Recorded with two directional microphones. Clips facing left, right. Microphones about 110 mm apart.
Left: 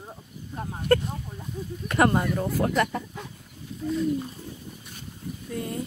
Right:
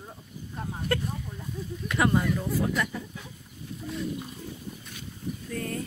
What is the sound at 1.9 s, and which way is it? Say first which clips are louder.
Speech: left 3 dB; 50° left (ahead or behind).